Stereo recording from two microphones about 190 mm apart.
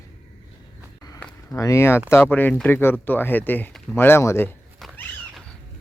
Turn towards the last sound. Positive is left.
turn(degrees=0)  # may be behind; listen again after turning